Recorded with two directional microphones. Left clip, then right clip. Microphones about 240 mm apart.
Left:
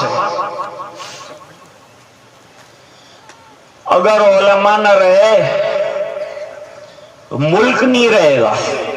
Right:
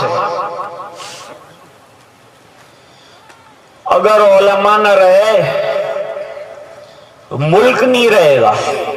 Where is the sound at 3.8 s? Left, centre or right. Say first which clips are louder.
Right 1 dB; right.